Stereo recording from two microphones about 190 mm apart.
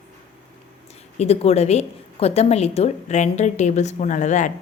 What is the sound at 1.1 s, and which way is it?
A woman's voice, 35° left (ahead or behind).